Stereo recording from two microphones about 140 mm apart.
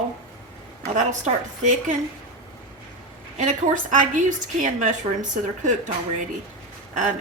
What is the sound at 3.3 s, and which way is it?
Speech, 60° right (ahead or behind).